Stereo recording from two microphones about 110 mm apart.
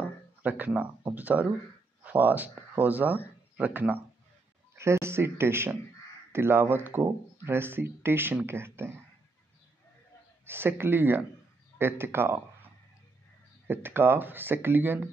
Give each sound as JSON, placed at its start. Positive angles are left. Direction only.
{"t": 0.4, "sound": "speech", "side_deg": -15}
{"t": 10.4, "sound": "speech", "side_deg": -20}
{"t": 13.7, "sound": "speech", "side_deg": -20}